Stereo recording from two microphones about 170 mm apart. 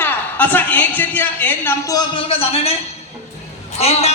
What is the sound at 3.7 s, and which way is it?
Speech, 40° left (ahead or behind).